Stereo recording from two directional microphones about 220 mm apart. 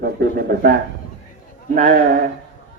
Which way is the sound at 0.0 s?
40° right (ahead or behind).